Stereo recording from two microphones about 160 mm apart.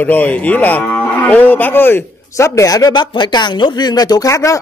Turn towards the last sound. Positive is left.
turn(degrees=20)  # may be behind; listen again after turning